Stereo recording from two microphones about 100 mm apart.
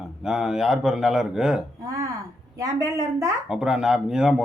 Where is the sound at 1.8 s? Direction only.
35° right (ahead or behind).